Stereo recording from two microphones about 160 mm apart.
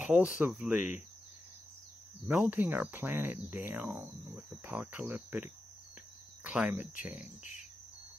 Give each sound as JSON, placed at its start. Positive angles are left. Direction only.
{"t": 0.0, "sound": "speech", "side_deg": -5}
{"t": 2.2, "sound": "speech", "side_deg": -10}